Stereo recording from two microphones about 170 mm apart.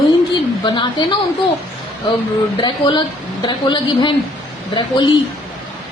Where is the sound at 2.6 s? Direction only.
25° left (ahead or behind).